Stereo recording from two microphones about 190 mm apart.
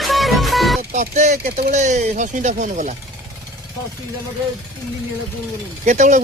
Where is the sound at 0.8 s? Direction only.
45° right (ahead or behind).